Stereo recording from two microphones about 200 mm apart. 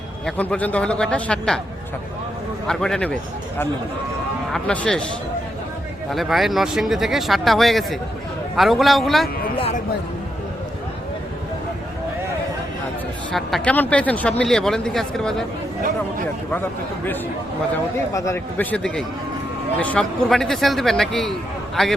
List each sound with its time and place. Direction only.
0.3 s speech: 5° left (ahead or behind)
2.6 s speech: 5° left (ahead or behind)
4.5 s speech: 5° left (ahead or behind)
6.1 s speech: centre (ahead or behind)
9.6 s music: 30° left (ahead or behind)
13.3 s speech: 5° left (ahead or behind)
17.9 s a man's voice: 15° left (ahead or behind)